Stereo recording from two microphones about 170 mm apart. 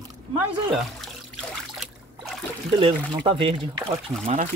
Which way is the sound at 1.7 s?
Centre (ahead or behind).